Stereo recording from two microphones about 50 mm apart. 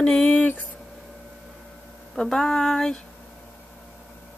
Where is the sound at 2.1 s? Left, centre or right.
Centre.